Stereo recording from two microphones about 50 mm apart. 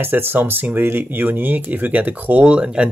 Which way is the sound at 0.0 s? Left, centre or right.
Right.